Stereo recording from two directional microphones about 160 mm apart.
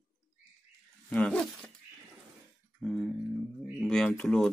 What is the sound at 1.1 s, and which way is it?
Speech, 5° left (ahead or behind).